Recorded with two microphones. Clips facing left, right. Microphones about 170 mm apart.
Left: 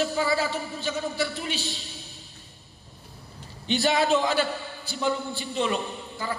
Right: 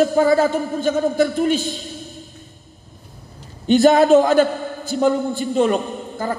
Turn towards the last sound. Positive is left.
turn(degrees=-45)  # may be behind; listen again after turning